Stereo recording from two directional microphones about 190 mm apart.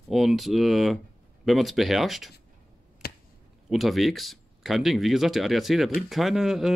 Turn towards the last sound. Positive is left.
turn(degrees=0)  # may be behind; listen again after turning